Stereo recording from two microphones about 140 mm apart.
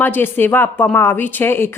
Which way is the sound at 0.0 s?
15° left (ahead or behind).